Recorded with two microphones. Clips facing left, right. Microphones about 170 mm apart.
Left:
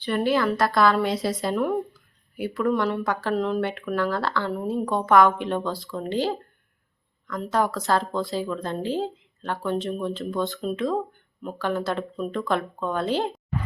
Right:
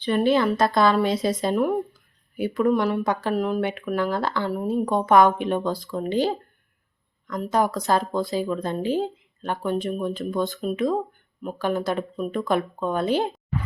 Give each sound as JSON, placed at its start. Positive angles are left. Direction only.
{"t": 0.0, "sound": "a woman's voice", "side_deg": -20}
{"t": 3.3, "sound": "speech", "side_deg": -5}